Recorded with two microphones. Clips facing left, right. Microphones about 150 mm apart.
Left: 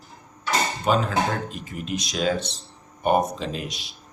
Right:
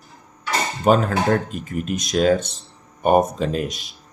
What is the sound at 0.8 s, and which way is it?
Speech, 50° right (ahead or behind).